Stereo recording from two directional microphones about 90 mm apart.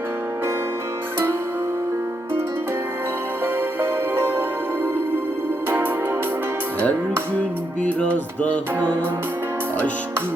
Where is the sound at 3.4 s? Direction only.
25° right (ahead or behind).